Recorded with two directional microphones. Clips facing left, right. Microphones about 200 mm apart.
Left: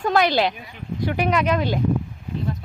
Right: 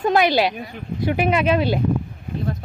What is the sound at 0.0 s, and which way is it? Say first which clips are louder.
Speech: right 2 dB; 15° right (ahead or behind).